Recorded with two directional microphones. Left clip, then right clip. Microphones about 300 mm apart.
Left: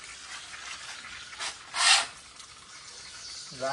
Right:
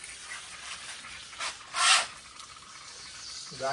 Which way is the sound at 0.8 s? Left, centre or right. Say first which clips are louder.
Left 1 dB; centre.